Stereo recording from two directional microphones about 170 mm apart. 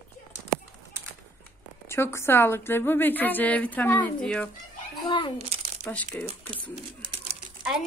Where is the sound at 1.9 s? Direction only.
15° left (ahead or behind).